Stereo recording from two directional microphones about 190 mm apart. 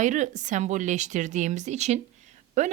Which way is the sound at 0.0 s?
40° right (ahead or behind).